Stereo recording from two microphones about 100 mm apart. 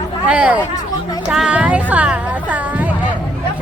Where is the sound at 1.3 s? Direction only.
10° right (ahead or behind).